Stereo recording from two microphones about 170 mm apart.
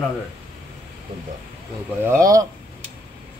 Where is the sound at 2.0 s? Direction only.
20° right (ahead or behind).